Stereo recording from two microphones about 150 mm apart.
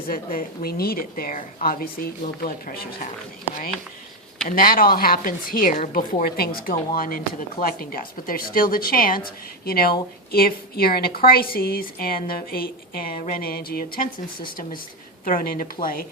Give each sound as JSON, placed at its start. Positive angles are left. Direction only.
{"t": 0.1, "sound": "a woman's voice", "side_deg": 70}
{"t": 4.4, "sound": "a woman's voice", "side_deg": 70}
{"t": 9.6, "sound": "a woman's voice", "side_deg": 90}
{"t": 15.2, "sound": "a woman's voice", "side_deg": 65}